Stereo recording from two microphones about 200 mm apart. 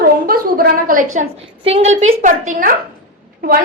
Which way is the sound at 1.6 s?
30° right (ahead or behind).